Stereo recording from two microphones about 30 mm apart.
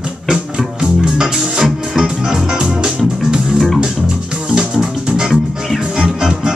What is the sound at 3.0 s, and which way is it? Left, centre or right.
Music, right.